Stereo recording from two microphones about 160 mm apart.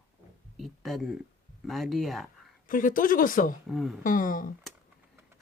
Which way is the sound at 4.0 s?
55° left (ahead or behind).